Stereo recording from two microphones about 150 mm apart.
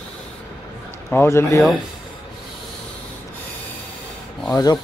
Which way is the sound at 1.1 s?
15° left (ahead or behind).